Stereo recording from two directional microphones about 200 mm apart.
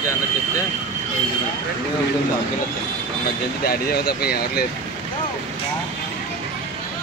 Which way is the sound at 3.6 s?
50° left (ahead or behind).